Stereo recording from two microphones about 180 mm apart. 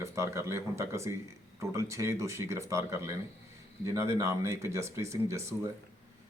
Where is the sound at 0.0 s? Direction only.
15° right (ahead or behind).